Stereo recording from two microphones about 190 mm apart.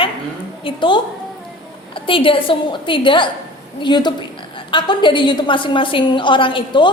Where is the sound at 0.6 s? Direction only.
25° left (ahead or behind).